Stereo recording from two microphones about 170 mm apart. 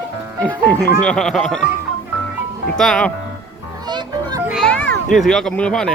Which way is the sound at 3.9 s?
25° right (ahead or behind).